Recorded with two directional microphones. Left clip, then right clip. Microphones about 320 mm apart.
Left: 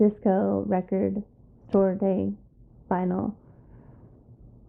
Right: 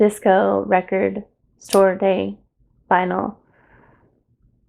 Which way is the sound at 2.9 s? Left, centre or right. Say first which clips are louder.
Right 10 dB; centre.